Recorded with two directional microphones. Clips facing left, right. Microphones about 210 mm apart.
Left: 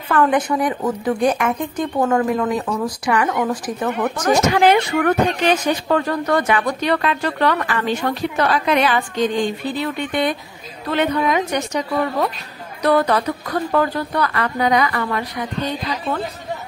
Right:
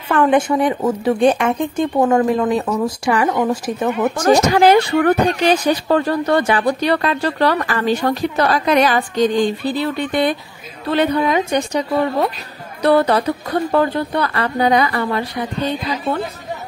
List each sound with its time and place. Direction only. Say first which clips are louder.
0.1 s a woman's voice: right 3 dB; 25° right (ahead or behind)
4.2 s a woman's voice: right 3 dB; 35° right (ahead or behind)